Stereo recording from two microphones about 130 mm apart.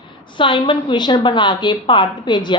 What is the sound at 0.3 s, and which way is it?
A woman's voice, 40° left (ahead or behind).